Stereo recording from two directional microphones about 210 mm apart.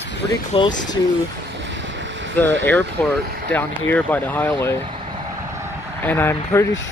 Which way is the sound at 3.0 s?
5° left (ahead or behind).